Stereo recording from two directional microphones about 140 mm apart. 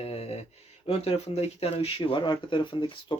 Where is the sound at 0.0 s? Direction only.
45° left (ahead or behind).